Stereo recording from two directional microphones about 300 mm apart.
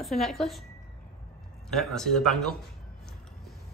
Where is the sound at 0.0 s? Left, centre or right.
Centre.